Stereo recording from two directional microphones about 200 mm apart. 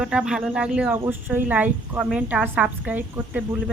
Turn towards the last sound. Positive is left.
turn(degrees=-5)  # may be behind; listen again after turning